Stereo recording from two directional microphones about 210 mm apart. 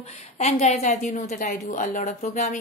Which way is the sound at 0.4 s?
30° left (ahead or behind).